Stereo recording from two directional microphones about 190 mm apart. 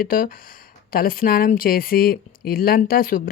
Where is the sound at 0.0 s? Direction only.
45° left (ahead or behind).